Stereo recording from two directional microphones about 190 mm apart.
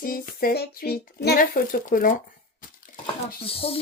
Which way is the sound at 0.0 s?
50° left (ahead or behind).